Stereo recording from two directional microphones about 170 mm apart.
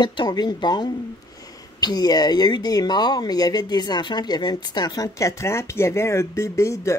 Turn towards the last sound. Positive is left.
turn(degrees=15)  # may be behind; listen again after turning